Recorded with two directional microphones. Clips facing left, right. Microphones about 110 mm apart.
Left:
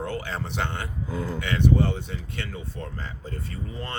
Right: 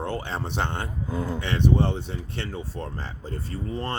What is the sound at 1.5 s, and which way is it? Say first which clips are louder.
A man's voice: even; 30° right (ahead or behind).